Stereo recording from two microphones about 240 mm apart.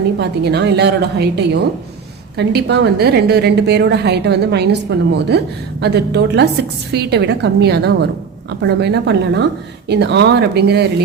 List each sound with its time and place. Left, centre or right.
0.2 s a woman's voice: right